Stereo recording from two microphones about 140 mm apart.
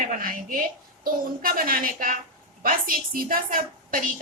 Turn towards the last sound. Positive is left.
turn(degrees=-85)